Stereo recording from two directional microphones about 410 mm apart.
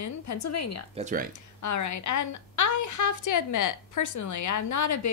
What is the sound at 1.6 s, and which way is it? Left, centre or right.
A woman's voice, left.